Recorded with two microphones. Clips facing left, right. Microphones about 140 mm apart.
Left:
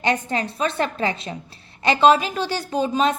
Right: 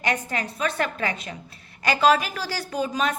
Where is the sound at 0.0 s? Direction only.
25° left (ahead or behind).